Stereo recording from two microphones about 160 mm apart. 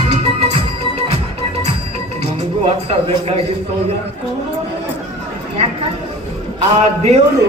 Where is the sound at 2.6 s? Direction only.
40° right (ahead or behind).